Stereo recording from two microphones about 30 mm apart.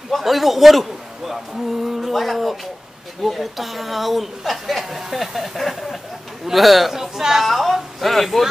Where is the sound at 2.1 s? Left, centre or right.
Centre.